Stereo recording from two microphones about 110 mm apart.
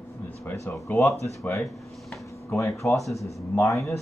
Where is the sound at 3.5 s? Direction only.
25° left (ahead or behind).